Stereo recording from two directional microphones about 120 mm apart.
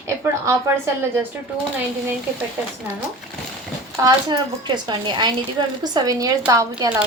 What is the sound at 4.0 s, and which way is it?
Speech, 35° right (ahead or behind).